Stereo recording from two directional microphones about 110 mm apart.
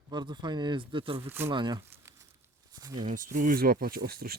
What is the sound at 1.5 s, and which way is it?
Speech, 45° right (ahead or behind).